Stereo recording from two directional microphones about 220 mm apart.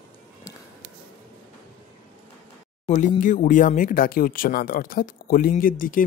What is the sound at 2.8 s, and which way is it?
Speech, 30° left (ahead or behind).